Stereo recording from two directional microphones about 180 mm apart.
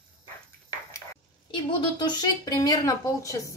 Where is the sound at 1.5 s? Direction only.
25° left (ahead or behind).